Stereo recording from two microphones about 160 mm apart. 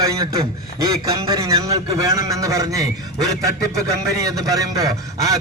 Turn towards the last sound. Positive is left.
turn(degrees=-20)  # may be behind; listen again after turning